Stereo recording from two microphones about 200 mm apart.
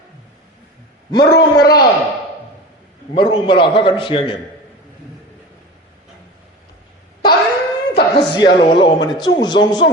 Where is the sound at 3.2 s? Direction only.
25° left (ahead or behind).